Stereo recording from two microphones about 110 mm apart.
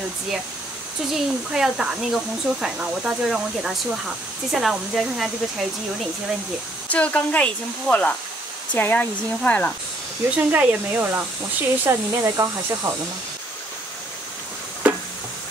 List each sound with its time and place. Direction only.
1.1 s speech: 5° right (ahead or behind)
6.9 s speech: 10° left (ahead or behind)
10.3 s speech: 15° right (ahead or behind)
14.8 s a sound: 10° right (ahead or behind)